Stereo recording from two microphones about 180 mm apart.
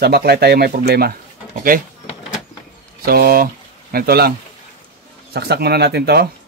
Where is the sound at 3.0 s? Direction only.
55° right (ahead or behind).